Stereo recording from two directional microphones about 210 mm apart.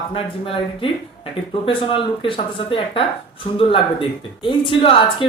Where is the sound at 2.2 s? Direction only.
25° left (ahead or behind).